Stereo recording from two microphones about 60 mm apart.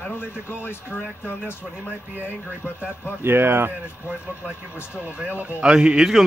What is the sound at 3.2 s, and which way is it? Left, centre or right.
Speech, right.